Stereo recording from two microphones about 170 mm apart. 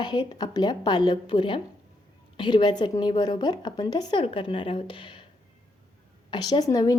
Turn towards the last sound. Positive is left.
turn(degrees=20)  # may be behind; listen again after turning